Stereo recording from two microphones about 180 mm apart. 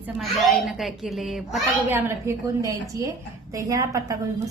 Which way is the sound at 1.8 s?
15° right (ahead or behind).